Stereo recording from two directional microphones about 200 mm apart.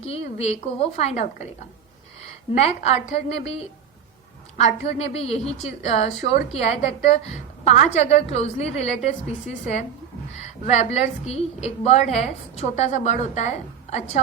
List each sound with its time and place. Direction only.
0.0 s a woman's voice: 30° left (ahead or behind)
2.6 s a woman's voice: 30° left (ahead or behind)
10.4 s a woman's voice: 35° left (ahead or behind)